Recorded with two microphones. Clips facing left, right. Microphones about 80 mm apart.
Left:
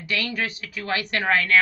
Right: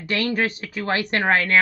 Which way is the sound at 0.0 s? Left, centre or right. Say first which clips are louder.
Right 5 dB; right.